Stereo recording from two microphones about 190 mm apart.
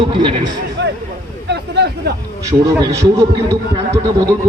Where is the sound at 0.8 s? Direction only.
65° right (ahead or behind).